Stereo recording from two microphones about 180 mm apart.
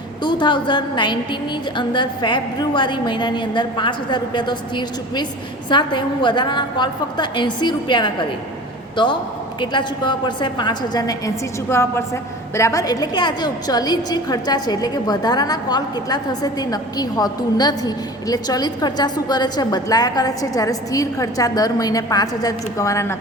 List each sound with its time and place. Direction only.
0.2 s a woman's voice: 25° left (ahead or behind)